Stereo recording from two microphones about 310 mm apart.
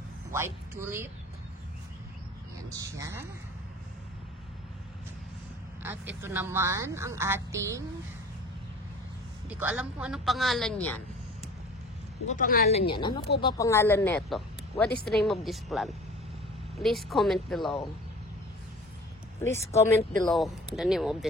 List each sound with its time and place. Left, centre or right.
0.3 s a woman's voice: centre
2.7 s speech: centre
5.8 s speech: centre
9.5 s a woman's voice: centre
12.3 s a woman's voice: left; by 17.7 s centre
19.4 s a woman's voice: centre